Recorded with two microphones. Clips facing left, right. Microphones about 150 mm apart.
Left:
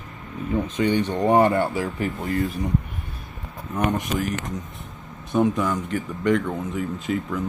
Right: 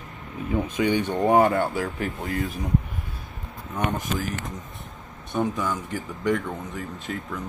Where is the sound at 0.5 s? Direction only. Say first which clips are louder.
Left 1 dB; 10° right (ahead or behind).